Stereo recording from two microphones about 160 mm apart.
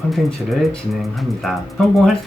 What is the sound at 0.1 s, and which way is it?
Speech, centre (ahead or behind).